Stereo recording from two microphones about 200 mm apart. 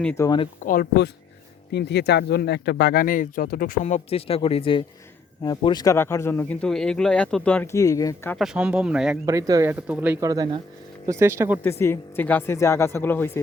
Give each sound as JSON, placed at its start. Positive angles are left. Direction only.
{"t": 0.0, "sound": "speech", "side_deg": 10}
{"t": 0.6, "sound": "speech", "side_deg": 45}
{"t": 8.4, "sound": "speech", "side_deg": -5}
{"t": 9.2, "sound": "speech", "side_deg": -15}
{"t": 11.6, "sound": "speech", "side_deg": 10}